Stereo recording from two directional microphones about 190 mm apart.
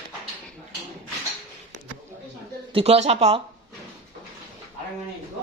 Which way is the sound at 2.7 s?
30° right (ahead or behind).